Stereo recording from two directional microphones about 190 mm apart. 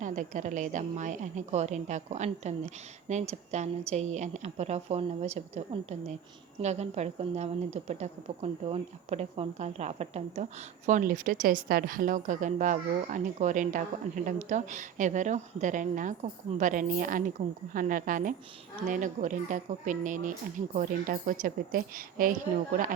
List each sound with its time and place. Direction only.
0.0 s a woman's voice: 40° right (ahead or behind)